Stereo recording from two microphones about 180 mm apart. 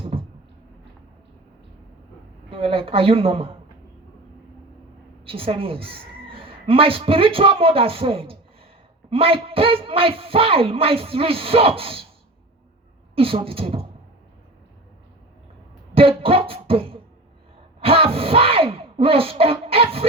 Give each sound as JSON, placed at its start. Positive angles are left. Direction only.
{"t": 2.5, "sound": "a woman's voice", "side_deg": -30}
{"t": 5.2, "sound": "a woman's voice", "side_deg": -30}
{"t": 13.1, "sound": "a woman's voice", "side_deg": -30}
{"t": 16.0, "sound": "beatboxing", "side_deg": -30}
{"t": 17.7, "sound": "a sound", "side_deg": -30}